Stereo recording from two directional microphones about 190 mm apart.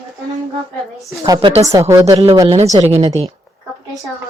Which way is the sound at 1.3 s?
25° right (ahead or behind).